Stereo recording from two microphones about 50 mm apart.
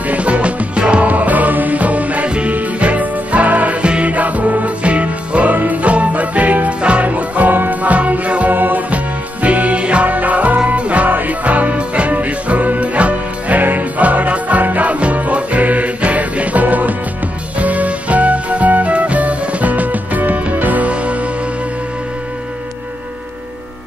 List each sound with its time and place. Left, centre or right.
0.0 s music: right
1.0 s music: right